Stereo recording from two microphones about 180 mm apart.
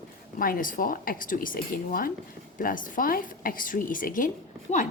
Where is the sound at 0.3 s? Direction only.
50° left (ahead or behind).